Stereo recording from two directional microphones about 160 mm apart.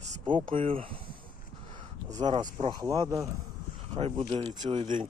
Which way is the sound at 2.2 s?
25° right (ahead or behind).